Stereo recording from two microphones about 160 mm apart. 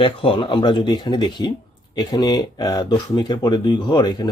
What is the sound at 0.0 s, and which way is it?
Speech, 35° left (ahead or behind).